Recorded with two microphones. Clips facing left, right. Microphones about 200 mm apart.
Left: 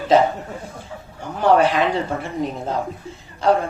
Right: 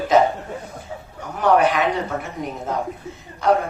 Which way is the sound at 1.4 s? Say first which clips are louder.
Left 1 dB; 30° left (ahead or behind).